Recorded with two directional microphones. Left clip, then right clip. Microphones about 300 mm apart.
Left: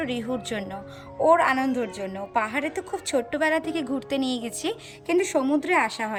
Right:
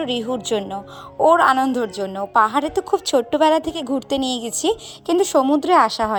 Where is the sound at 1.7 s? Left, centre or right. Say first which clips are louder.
Right 6 dB; centre.